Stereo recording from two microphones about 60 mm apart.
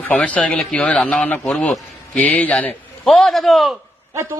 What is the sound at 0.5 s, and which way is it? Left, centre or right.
Speech, centre.